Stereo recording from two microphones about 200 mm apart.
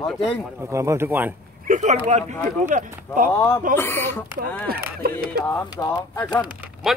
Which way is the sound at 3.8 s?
10° left (ahead or behind).